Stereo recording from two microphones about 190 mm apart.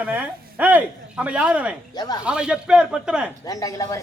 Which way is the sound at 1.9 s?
20° left (ahead or behind).